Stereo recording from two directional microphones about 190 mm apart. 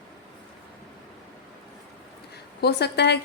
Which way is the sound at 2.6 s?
60° left (ahead or behind).